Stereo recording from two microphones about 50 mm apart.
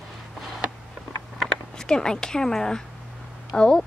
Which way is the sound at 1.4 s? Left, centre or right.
Centre.